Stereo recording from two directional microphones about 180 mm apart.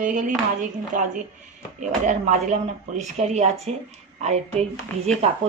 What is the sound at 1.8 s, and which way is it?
Speech, 45° right (ahead or behind).